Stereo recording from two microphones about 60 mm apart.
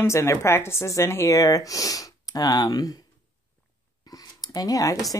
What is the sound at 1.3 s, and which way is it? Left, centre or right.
Speech, left.